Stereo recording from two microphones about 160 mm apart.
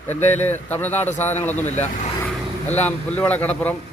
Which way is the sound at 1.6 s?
45° left (ahead or behind).